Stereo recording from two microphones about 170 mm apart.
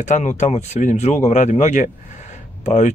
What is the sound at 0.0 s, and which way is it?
Speech, 45° left (ahead or behind).